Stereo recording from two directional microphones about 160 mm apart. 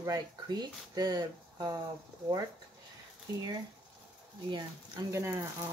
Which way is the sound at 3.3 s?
20° right (ahead or behind).